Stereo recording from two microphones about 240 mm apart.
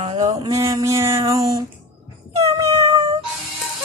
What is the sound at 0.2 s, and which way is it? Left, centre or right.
Speech, centre.